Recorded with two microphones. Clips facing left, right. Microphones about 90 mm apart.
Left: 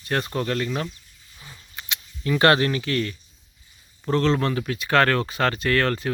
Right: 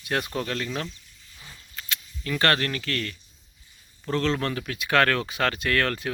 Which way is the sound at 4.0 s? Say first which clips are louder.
Left 4 dB; 5° left (ahead or behind).